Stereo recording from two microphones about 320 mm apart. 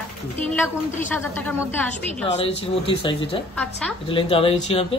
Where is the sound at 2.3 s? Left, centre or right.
Centre.